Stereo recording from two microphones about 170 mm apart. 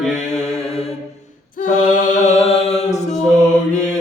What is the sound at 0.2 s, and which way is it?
Mantra, 40° left (ahead or behind).